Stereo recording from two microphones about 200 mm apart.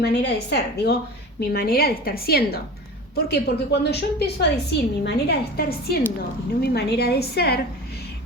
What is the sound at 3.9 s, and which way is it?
A woman's voice, 55° left (ahead or behind).